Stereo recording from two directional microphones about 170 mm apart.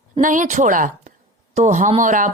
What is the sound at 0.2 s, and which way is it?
A woman's voice, 50° right (ahead or behind).